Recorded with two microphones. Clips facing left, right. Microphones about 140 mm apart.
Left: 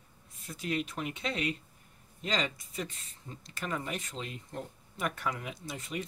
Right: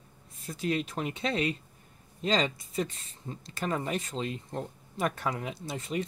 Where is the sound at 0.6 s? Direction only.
35° right (ahead or behind).